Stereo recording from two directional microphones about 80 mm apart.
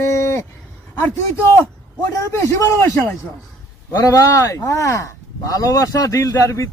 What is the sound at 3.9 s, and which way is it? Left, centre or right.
Speech, left.